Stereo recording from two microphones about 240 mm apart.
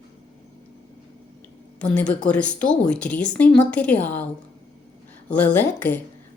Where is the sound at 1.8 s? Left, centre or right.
Centre.